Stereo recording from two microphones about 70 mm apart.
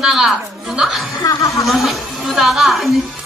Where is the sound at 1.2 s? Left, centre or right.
Left.